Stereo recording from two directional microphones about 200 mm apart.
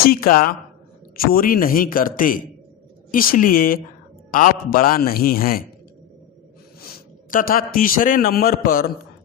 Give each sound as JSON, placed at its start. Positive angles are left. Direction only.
{"t": 0.0, "sound": "a man's voice", "side_deg": 45}
{"t": 7.3, "sound": "a man's voice", "side_deg": 45}